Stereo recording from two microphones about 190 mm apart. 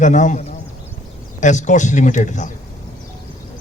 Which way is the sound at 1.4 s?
40° left (ahead or behind).